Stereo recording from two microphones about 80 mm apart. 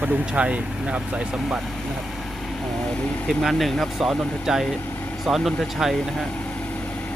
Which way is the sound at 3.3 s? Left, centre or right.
Centre.